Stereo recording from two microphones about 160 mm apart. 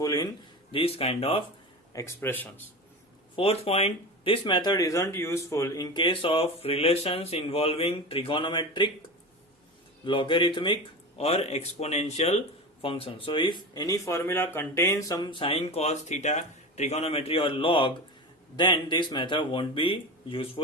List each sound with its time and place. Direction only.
0.0 s a sound: 25° left (ahead or behind)
0.7 s speech: 35° left (ahead or behind)
1.9 s speech: 20° left (ahead or behind)
3.3 s speech: 40° left (ahead or behind)
10.0 s speech: 30° left (ahead or behind)